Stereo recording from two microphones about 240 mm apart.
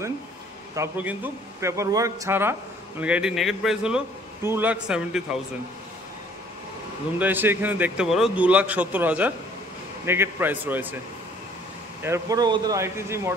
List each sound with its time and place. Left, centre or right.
0.7 s a man's voice: centre
7.2 s a man's voice: centre
12.0 s a man's voice: centre